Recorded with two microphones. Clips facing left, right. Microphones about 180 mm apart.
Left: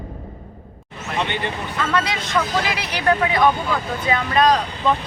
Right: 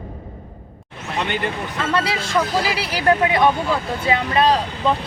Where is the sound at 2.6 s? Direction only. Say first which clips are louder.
Right 2 dB; 35° right (ahead or behind).